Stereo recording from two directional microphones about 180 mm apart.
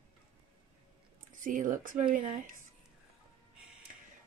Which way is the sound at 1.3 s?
45° right (ahead or behind).